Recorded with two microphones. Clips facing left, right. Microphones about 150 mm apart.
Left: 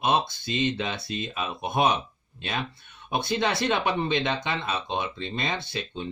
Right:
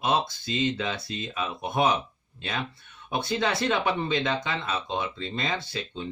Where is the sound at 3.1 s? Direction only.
20° left (ahead or behind).